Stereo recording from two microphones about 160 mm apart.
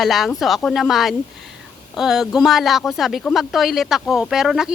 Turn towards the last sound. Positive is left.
turn(degrees=-5)  # may be behind; listen again after turning